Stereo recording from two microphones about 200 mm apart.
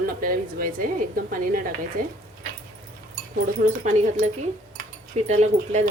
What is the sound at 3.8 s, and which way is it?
Speech, 35° right (ahead or behind).